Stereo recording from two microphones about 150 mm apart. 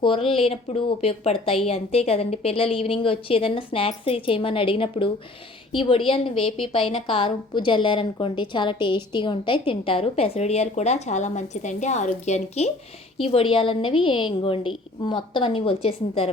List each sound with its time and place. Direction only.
0.0 s a woman's voice: 35° left (ahead or behind)